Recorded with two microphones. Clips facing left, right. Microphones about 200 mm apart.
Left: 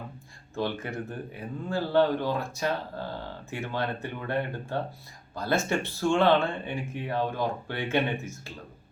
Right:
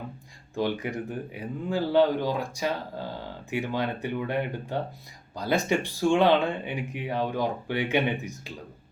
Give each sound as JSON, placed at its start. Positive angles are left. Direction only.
{"t": 0.5, "sound": "speech", "side_deg": -15}